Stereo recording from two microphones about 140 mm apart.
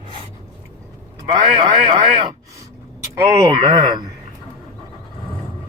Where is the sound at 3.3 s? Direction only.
25° right (ahead or behind).